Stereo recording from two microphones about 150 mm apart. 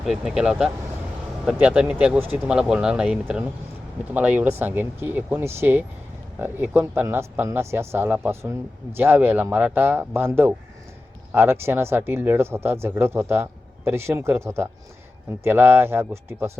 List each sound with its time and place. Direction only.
0.0 s speech: centre (ahead or behind)